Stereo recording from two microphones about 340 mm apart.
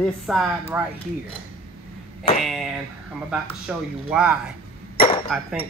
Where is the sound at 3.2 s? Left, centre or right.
Centre.